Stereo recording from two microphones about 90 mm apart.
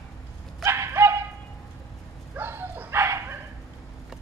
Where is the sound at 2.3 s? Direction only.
25° right (ahead or behind).